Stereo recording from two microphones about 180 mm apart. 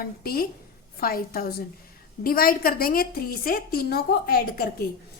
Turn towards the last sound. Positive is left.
turn(degrees=55)  # may be behind; listen again after turning